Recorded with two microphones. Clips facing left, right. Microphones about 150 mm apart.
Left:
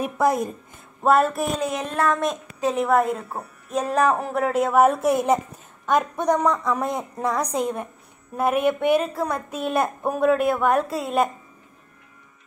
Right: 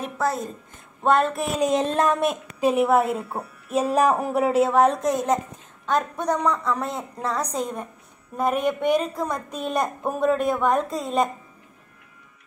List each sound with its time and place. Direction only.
0.0 s a woman's voice: 15° left (ahead or behind)
1.0 s a woman's voice: 5° left (ahead or behind)
1.7 s speech: 25° right (ahead or behind)
2.0 s a woman's voice: 10° right (ahead or behind); by 11.2 s 5° left (ahead or behind)